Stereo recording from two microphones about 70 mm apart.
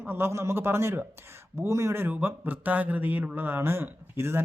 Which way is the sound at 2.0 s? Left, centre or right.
Right.